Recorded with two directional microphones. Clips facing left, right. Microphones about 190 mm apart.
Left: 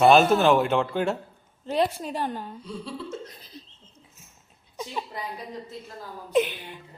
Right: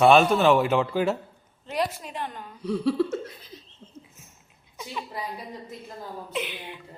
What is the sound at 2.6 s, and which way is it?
Speech, 65° right (ahead or behind).